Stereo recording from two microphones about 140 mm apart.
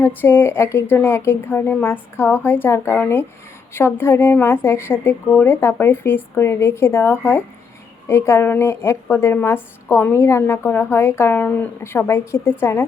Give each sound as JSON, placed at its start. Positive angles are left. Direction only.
{"t": 0.0, "sound": "a woman's voice", "side_deg": 15}